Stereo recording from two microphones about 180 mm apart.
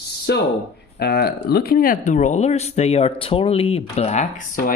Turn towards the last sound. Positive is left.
turn(degrees=45)  # may be behind; listen again after turning